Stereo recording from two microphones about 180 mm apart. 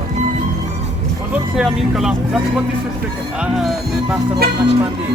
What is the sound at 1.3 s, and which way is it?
Speech, 5° right (ahead or behind).